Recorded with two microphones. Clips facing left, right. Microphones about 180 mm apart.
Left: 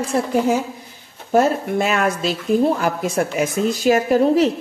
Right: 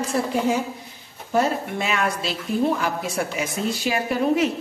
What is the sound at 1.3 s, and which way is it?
A woman's voice, 50° left (ahead or behind).